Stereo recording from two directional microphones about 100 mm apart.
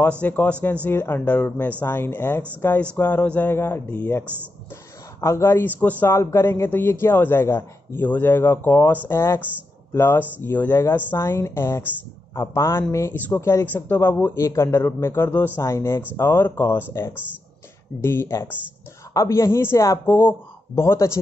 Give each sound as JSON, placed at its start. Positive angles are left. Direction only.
{"t": 0.2, "sound": "a man's voice", "side_deg": 15}
{"t": 5.2, "sound": "a man's voice", "side_deg": 25}
{"t": 17.1, "sound": "speech", "side_deg": -15}
{"t": 18.0, "sound": "a man's voice", "side_deg": 25}